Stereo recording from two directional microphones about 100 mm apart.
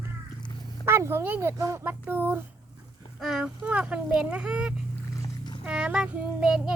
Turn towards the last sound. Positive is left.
turn(degrees=-10)  # may be behind; listen again after turning